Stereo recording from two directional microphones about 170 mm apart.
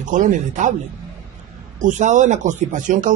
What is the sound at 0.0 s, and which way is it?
Speech, 45° right (ahead or behind).